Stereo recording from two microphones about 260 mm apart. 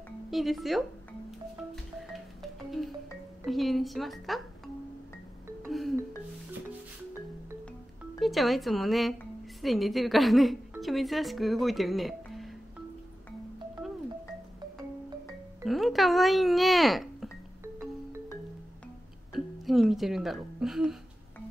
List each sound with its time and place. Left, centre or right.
0.3 s a child's voice: centre
3.4 s a child's voice: centre
5.6 s music: centre
8.2 s a woman's voice: centre
15.6 s a child's voice: centre
19.3 s speech: centre